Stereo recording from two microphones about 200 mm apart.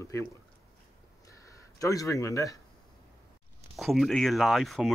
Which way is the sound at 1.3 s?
15° left (ahead or behind).